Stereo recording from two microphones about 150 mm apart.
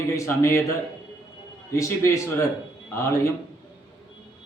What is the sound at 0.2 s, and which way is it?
Speech, 20° left (ahead or behind).